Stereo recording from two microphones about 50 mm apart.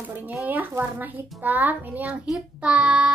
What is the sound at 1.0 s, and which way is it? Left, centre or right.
A child's voice, right.